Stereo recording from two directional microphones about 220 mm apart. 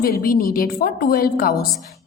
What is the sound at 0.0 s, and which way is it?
A woman's voice, 40° left (ahead or behind).